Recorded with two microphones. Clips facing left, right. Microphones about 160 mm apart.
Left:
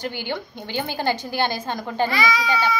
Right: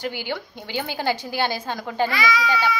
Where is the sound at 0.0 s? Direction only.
10° right (ahead or behind).